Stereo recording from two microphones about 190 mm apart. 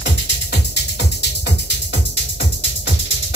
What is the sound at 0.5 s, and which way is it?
Music, 60° left (ahead or behind).